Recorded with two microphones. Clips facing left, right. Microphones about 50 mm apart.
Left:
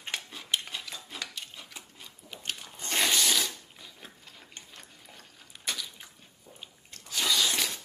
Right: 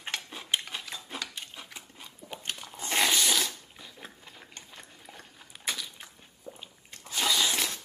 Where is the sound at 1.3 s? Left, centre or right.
Centre.